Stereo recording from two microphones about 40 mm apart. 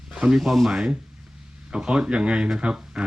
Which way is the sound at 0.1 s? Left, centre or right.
Right.